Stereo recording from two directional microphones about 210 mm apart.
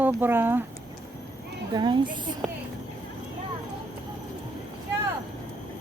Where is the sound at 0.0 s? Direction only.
10° right (ahead or behind).